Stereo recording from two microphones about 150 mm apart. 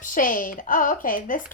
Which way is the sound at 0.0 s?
65° left (ahead or behind).